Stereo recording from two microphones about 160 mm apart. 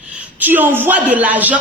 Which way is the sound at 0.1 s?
10° right (ahead or behind).